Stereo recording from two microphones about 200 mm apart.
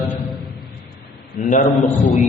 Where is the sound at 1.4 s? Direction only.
40° left (ahead or behind).